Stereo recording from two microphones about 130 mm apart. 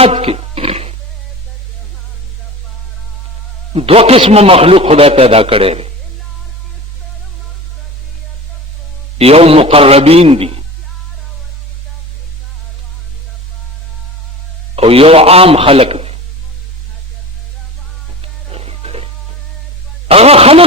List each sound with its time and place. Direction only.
0.0 s a sound: 50° right (ahead or behind)
3.8 s a man's voice: 50° right (ahead or behind)
9.1 s a man's voice: 50° right (ahead or behind)
14.8 s a man's voice: 45° right (ahead or behind)
18.2 s music: 50° right (ahead or behind)
20.1 s a man's voice: 50° right (ahead or behind)